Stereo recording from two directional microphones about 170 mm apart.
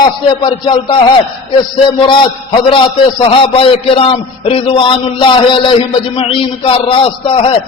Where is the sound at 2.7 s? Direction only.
30° left (ahead or behind).